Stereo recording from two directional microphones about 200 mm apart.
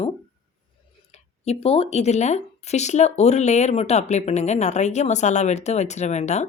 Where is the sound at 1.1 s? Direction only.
30° left (ahead or behind).